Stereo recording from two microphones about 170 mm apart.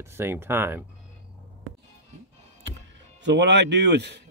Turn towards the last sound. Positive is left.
turn(degrees=-90)